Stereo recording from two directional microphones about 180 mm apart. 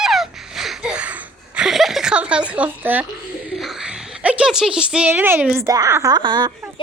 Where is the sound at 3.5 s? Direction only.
Centre (ahead or behind); by 6.5 s 25° right (ahead or behind).